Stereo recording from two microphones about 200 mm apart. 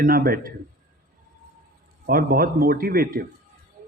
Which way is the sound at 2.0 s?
45° right (ahead or behind).